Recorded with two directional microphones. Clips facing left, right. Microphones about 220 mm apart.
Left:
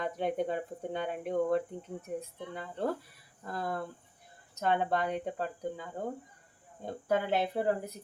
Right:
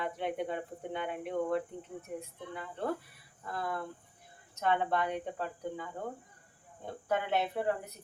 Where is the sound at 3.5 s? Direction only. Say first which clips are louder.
Left 1 dB; 40° left (ahead or behind).